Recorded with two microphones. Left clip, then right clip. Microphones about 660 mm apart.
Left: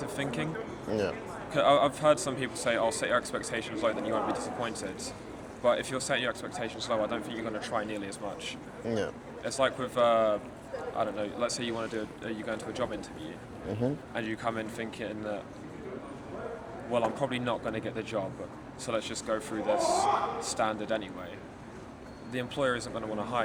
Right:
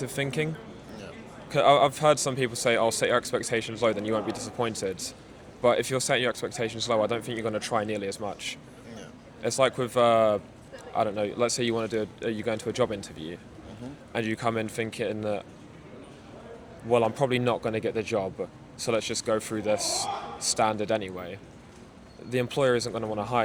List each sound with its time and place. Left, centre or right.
0.0 s speech: right
1.5 s speech: right
8.9 s a man's voice: left
9.4 s speech: right
14.1 s speech: right
16.9 s speech: right